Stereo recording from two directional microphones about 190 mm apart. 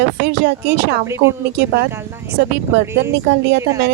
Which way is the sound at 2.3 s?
65° right (ahead or behind).